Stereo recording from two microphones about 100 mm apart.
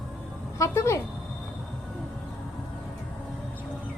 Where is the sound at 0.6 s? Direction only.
30° left (ahead or behind).